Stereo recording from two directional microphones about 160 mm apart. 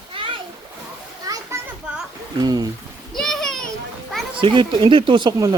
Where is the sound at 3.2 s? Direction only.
Centre (ahead or behind).